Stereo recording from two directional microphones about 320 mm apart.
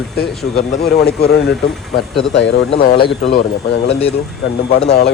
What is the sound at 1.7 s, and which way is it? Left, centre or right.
Speech, centre.